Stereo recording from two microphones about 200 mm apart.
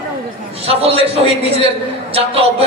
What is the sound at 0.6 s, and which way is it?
Speech, 30° right (ahead or behind).